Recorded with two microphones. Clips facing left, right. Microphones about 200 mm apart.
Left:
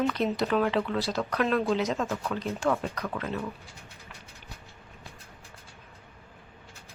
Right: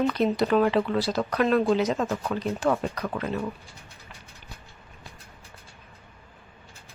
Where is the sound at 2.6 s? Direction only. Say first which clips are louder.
Right 2 dB; 15° right (ahead or behind).